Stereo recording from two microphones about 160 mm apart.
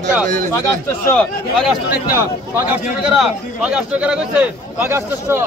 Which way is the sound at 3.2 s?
5° right (ahead or behind).